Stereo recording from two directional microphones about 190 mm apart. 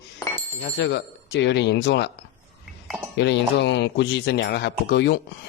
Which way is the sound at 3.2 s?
65° left (ahead or behind).